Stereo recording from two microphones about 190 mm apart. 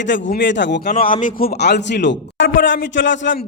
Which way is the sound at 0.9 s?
45° left (ahead or behind).